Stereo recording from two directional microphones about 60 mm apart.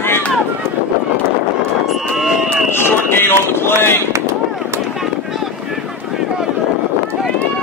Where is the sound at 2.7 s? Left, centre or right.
Left.